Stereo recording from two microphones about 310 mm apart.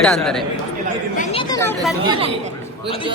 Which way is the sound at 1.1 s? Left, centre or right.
Centre.